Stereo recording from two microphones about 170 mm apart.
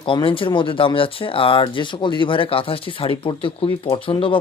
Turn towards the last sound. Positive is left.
turn(degrees=30)  # may be behind; listen again after turning